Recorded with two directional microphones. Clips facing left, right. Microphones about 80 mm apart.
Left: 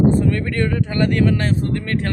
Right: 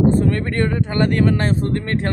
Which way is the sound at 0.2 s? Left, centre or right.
Right.